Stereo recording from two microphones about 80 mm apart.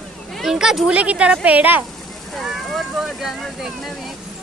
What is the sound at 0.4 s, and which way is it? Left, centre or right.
A woman's voice, centre.